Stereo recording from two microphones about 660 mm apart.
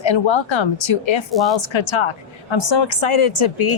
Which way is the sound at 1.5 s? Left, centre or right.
Left.